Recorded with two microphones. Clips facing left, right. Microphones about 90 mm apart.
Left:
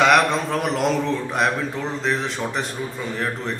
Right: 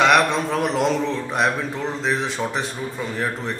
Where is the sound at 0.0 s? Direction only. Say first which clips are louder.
Even; centre (ahead or behind).